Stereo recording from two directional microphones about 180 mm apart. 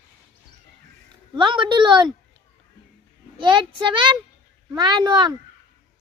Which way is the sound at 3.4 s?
25° right (ahead or behind).